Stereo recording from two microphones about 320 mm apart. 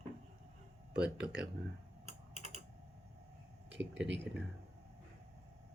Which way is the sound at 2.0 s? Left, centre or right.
Right.